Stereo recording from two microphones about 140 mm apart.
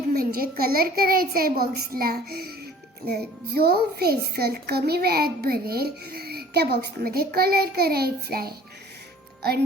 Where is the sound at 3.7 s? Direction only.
90° right.